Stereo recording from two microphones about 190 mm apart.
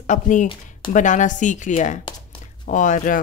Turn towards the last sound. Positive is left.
turn(degrees=40)  # may be behind; listen again after turning